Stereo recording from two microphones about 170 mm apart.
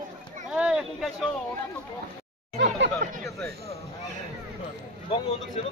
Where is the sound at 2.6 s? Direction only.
90° right.